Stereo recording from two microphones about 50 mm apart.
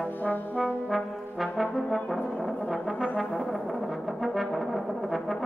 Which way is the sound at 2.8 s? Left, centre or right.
Centre.